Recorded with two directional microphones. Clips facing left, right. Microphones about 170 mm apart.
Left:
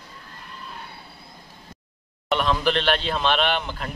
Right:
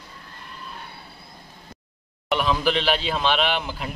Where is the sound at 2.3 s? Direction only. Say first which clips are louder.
Even; 5° right (ahead or behind).